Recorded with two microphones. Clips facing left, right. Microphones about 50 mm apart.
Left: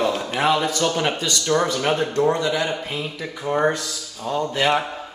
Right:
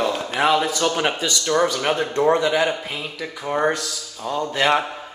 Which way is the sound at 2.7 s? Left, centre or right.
Centre.